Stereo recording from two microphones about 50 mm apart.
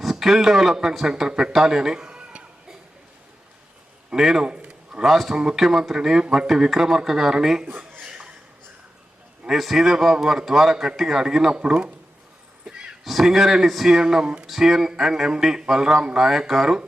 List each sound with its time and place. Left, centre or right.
0.0 s a man's voice: centre
4.1 s speech: centre
4.4 s a sound: right
5.0 s speech: centre
9.4 s speech: centre
13.1 s speech: centre
14.4 s speech: centre